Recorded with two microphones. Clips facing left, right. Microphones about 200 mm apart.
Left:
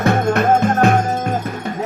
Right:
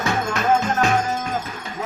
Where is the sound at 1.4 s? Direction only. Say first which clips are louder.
Left 8 dB; 60° left (ahead or behind).